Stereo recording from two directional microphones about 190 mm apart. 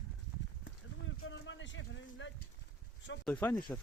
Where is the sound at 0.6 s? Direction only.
80° left.